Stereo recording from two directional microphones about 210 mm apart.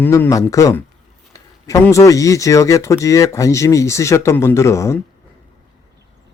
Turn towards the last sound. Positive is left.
turn(degrees=15)  # may be behind; listen again after turning